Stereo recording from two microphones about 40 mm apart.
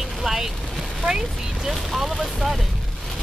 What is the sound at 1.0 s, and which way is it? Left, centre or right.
Speech, centre.